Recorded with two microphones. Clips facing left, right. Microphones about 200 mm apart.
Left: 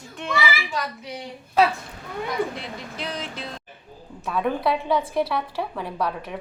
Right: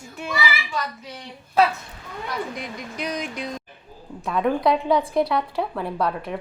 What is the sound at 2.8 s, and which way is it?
Speech, 15° right (ahead or behind).